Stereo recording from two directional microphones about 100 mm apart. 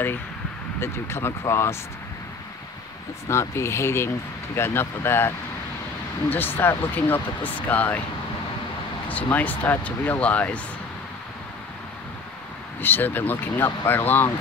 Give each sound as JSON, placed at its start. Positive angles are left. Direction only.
{"t": 0.7, "sound": "speech", "side_deg": 25}
{"t": 3.3, "sound": "speech", "side_deg": 25}
{"t": 9.1, "sound": "speech", "side_deg": 15}
{"t": 12.8, "sound": "speech", "side_deg": 20}